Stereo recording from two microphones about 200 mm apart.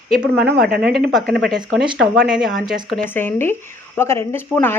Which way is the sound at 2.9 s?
10° left (ahead or behind).